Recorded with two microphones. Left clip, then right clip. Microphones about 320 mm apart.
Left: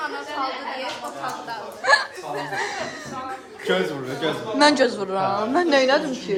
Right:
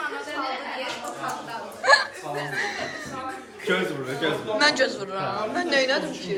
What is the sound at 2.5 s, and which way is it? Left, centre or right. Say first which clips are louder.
Speech: left 1 dB; centre.